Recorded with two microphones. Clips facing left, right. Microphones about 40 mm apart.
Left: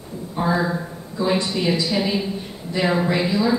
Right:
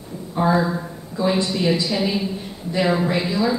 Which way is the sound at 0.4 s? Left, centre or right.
Centre.